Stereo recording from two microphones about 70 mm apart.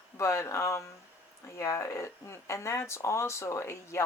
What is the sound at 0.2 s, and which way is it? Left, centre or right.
Speech, left.